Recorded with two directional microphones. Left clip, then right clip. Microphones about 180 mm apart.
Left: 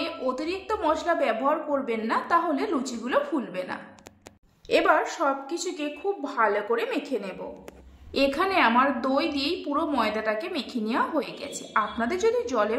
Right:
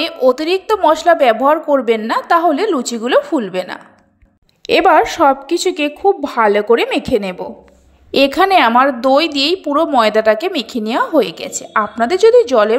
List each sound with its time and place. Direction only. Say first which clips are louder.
0.0 s a woman's voice: right 15 dB; 45° right (ahead or behind)